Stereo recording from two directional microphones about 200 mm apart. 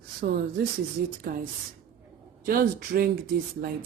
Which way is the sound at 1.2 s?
50° right (ahead or behind).